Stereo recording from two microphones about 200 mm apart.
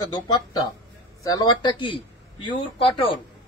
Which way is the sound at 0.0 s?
20° left (ahead or behind).